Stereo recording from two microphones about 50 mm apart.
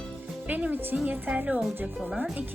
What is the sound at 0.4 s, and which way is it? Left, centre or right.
Speech, right.